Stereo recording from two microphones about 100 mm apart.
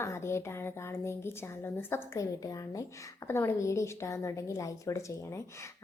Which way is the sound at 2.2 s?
35° left (ahead or behind).